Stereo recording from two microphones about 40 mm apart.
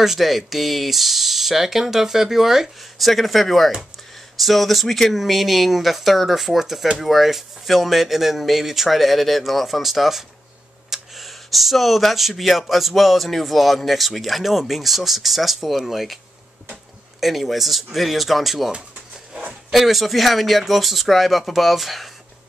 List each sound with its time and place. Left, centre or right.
0.0 s speech: centre
17.2 s speech: centre
19.7 s speech: centre